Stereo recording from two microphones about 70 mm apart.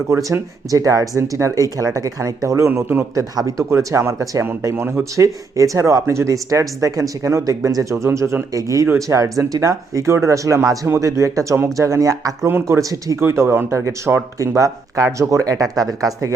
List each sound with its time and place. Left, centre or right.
0.1 s speech: right
0.7 s speech: right
3.2 s speech: right
12.5 s speech: right
12.8 s speech: right
13.1 s speech: right